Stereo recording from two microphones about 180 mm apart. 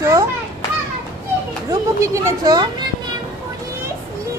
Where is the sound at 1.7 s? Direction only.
15° right (ahead or behind).